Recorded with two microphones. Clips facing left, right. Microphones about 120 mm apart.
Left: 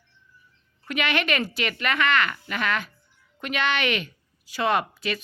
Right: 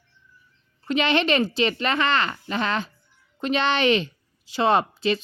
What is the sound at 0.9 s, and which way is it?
A woman's voice, 30° right (ahead or behind).